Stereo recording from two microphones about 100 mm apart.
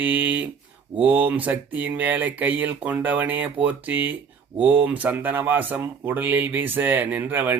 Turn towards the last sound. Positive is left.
turn(degrees=-20)  # may be behind; listen again after turning